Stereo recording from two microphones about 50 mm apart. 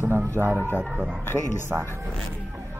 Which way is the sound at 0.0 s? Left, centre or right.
Right.